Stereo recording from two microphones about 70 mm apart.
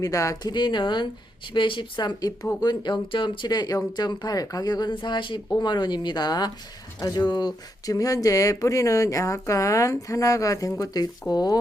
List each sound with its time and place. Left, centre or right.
0.0 s speech: left
0.5 s speech: left